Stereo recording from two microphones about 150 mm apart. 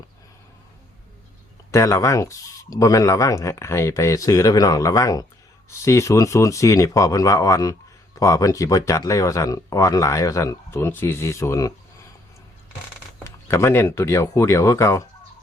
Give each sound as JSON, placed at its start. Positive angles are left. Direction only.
{"t": 1.7, "sound": "speech", "side_deg": 20}
{"t": 13.2, "sound": "speech", "side_deg": 15}